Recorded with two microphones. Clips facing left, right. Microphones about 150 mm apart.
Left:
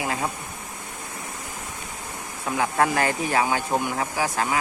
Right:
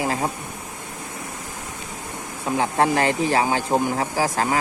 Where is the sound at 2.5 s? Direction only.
25° right (ahead or behind).